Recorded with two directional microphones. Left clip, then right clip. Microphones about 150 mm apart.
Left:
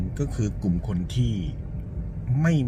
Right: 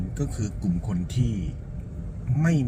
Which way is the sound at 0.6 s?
30° left (ahead or behind).